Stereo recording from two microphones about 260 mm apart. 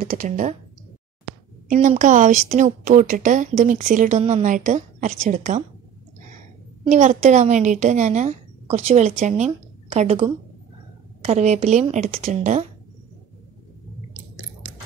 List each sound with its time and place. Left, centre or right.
0.0 s speech: right
1.7 s speech: right
6.8 s speech: right